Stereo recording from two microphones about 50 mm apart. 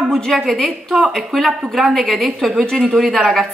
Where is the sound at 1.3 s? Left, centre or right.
Centre.